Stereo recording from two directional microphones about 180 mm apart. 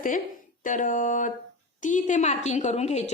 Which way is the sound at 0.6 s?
45° left (ahead or behind).